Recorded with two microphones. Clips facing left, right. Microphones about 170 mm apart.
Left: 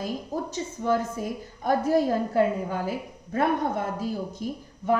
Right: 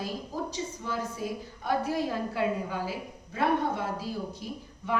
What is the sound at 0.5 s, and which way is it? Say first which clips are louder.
A woman's voice: left 8 dB; 50° left (ahead or behind).